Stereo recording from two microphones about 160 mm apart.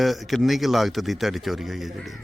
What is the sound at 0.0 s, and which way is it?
Speech, centre (ahead or behind).